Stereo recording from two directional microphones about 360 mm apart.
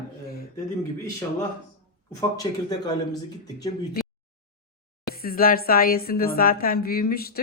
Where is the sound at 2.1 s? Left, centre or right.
Centre.